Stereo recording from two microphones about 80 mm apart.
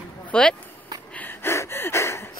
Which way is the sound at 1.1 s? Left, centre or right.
Left.